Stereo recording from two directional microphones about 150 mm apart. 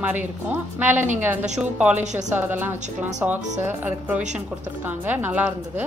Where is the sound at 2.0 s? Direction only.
50° right (ahead or behind).